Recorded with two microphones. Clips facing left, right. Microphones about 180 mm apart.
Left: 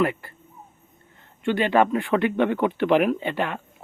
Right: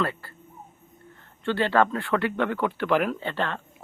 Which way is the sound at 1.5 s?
15° left (ahead or behind).